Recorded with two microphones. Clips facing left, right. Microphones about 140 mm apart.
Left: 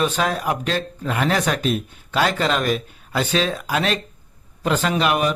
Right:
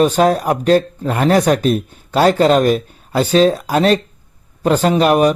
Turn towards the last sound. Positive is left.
turn(degrees=-40)  # may be behind; listen again after turning